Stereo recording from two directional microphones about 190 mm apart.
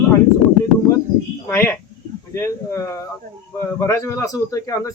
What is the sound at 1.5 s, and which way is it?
Speech, 10° left (ahead or behind).